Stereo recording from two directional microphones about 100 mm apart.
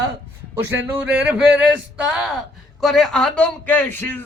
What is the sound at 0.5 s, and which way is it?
Speech, 20° right (ahead or behind).